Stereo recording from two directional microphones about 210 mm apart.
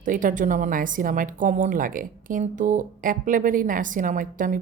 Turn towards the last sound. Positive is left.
turn(degrees=-40)  # may be behind; listen again after turning